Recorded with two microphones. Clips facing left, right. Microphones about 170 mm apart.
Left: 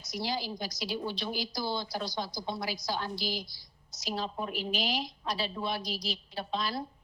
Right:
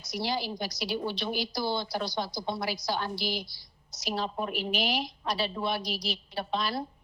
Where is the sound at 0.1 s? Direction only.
65° right (ahead or behind).